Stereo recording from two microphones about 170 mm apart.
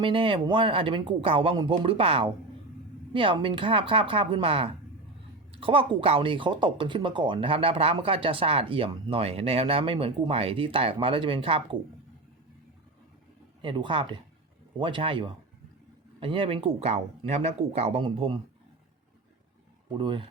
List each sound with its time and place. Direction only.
0.0 s speech: 30° right (ahead or behind)
13.6 s speech: 30° right (ahead or behind)
19.9 s speech: 30° right (ahead or behind)